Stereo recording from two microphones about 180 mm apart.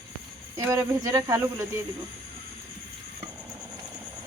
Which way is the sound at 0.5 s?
15° right (ahead or behind).